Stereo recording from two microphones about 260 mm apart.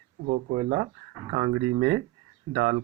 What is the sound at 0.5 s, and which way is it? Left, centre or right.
Speech, right.